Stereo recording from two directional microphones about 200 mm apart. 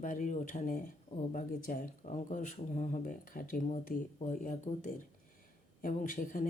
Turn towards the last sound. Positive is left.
turn(degrees=40)  # may be behind; listen again after turning